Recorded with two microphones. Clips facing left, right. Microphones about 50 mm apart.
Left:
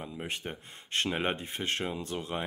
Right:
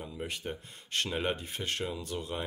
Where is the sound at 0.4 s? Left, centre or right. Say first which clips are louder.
Right 1 dB; left.